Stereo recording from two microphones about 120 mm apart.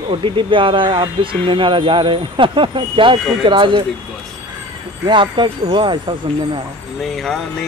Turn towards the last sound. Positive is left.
turn(degrees=0)  # may be behind; listen again after turning